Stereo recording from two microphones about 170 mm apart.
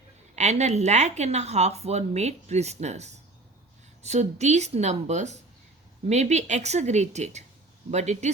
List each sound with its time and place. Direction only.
0.3 s speech: 40° right (ahead or behind)